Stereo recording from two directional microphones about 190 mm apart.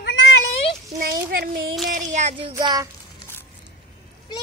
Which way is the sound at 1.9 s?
40° right (ahead or behind).